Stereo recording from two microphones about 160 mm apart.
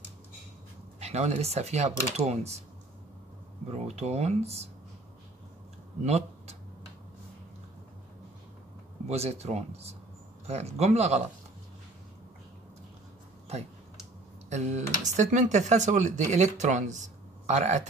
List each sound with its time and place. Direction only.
0.9 s speech: 45° right (ahead or behind)
3.6 s speech: 40° right (ahead or behind)
6.0 s a sound: 40° right (ahead or behind)
9.0 s speech: 40° right (ahead or behind)
14.5 s speech: 45° right (ahead or behind)